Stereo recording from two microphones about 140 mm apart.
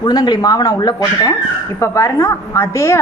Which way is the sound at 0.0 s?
30° left (ahead or behind).